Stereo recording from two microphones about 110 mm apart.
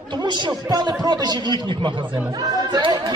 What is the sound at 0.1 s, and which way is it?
Speech, 45° right (ahead or behind).